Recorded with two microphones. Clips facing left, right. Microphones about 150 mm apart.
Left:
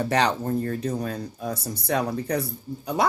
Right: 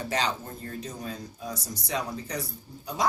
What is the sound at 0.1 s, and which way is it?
Speech, 65° left (ahead or behind).